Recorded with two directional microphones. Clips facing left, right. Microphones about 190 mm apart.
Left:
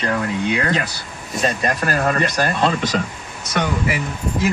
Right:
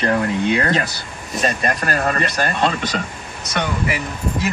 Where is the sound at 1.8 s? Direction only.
10° left (ahead or behind).